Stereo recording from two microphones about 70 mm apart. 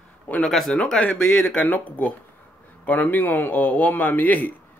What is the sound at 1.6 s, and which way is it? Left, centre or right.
A man's voice, left.